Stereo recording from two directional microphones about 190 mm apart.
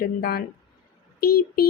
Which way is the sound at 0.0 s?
55° left (ahead or behind).